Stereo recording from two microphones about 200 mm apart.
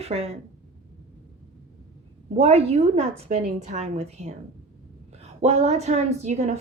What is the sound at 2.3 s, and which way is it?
A woman's voice, 30° right (ahead or behind).